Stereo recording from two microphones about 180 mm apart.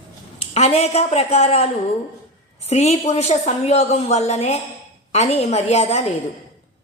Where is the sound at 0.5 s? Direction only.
35° left (ahead or behind).